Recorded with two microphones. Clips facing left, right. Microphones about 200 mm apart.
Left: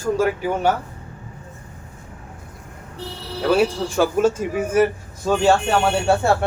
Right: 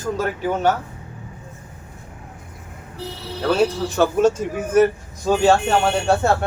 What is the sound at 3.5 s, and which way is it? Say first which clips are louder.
Speech: left 1 dB; 10° left (ahead or behind).